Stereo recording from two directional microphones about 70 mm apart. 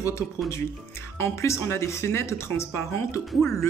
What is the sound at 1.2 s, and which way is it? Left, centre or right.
Speech, left.